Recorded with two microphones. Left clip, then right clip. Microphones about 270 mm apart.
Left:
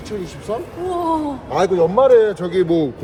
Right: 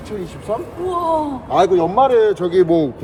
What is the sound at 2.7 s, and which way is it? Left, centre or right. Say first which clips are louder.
Speech: right 2 dB; centre.